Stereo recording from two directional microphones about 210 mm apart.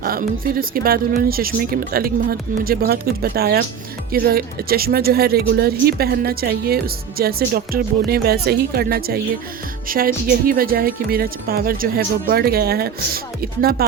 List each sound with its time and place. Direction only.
0.0 s speech: 45° right (ahead or behind)